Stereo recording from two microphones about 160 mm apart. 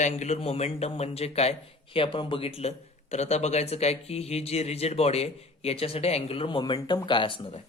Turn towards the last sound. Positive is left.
turn(degrees=35)  # may be behind; listen again after turning